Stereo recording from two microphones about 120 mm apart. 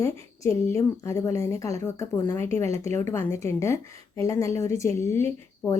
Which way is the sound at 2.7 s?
60° right (ahead or behind).